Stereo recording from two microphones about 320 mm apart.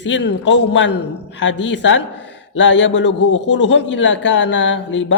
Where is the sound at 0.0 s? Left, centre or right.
Left.